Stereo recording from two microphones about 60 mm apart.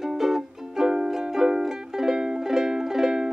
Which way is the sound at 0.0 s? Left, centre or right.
Centre.